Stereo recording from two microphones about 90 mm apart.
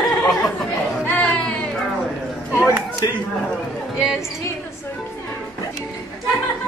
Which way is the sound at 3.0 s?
45° left (ahead or behind).